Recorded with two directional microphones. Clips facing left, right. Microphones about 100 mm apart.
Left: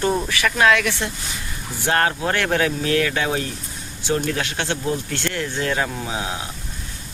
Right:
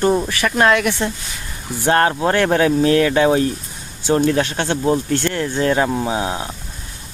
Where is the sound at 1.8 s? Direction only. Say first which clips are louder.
Right 5 dB; 30° right (ahead or behind).